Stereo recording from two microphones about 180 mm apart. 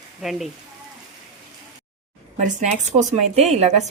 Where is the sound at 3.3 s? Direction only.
35° right (ahead or behind).